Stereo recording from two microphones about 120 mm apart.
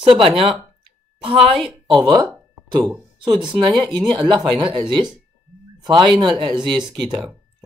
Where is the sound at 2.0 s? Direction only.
30° right (ahead or behind).